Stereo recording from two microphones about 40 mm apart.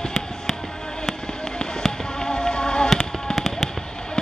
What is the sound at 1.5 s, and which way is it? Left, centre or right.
Fireworks, centre.